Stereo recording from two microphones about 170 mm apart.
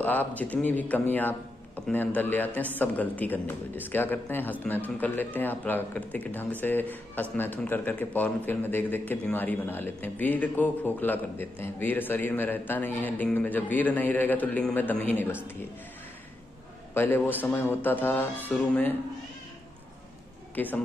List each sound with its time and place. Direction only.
0.0 s speech: 10° left (ahead or behind)
16.9 s speech: 15° left (ahead or behind)
20.5 s speech: 10° left (ahead or behind)